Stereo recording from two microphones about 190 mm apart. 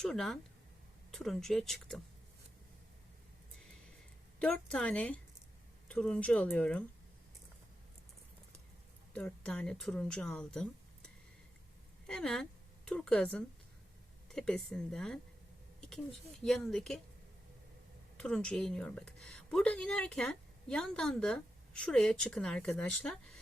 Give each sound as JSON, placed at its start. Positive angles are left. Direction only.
{"t": 0.0, "sound": "speech", "side_deg": 0}
{"t": 4.4, "sound": "speech", "side_deg": 5}
{"t": 9.1, "sound": "a woman's voice", "side_deg": 5}
{"t": 16.4, "sound": "speech", "side_deg": 0}
{"t": 18.2, "sound": "speech", "side_deg": 5}